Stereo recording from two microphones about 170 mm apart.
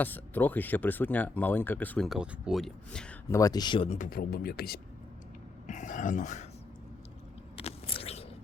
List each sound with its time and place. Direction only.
0.0 s speech: 10° left (ahead or behind)
2.0 s speech: 5° right (ahead or behind)
3.2 s speech: 20° left (ahead or behind)
3.8 s a man's voice: 50° left (ahead or behind); by 4.8 s 65° left (ahead or behind)
5.6 s a sound: 45° left (ahead or behind)
7.5 s biting: 35° left (ahead or behind)